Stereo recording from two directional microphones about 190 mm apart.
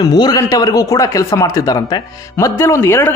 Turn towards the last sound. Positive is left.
turn(degrees=10)  # may be behind; listen again after turning